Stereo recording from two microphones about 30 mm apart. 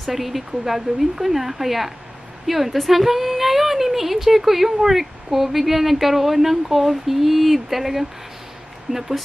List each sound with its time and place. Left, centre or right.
0.0 s a woman's voice: centre
8.9 s speech: right